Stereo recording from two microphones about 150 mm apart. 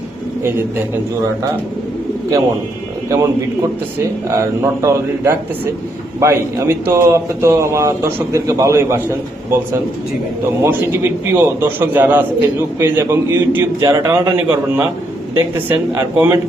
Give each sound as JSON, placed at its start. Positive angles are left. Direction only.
{"t": 3.1, "sound": "speech", "side_deg": -20}
{"t": 10.6, "sound": "a man's voice", "side_deg": -15}